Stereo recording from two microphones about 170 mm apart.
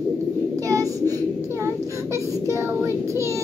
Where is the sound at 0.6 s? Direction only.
20° right (ahead or behind).